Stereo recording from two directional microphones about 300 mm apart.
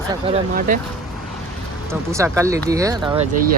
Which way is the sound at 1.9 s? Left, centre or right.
Centre.